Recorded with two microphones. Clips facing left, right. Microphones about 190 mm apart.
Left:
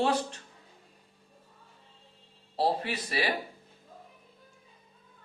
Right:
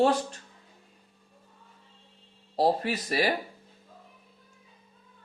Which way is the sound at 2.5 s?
40° right (ahead or behind).